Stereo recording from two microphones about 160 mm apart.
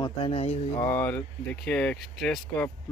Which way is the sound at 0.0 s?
35° left (ahead or behind).